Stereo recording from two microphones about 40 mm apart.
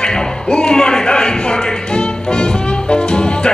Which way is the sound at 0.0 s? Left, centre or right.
Centre.